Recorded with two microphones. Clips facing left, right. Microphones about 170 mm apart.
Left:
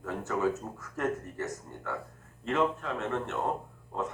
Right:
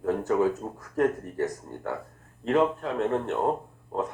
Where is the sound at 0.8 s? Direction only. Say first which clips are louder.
Right 7 dB; 35° right (ahead or behind).